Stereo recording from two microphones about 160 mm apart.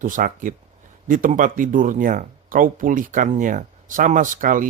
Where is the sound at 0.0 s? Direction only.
55° right (ahead or behind).